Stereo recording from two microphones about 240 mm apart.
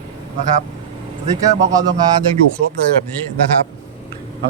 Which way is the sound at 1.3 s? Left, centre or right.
Centre.